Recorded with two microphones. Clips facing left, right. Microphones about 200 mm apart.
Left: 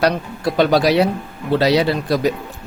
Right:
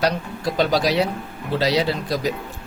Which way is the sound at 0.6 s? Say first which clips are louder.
Left 5 dB; 60° left (ahead or behind).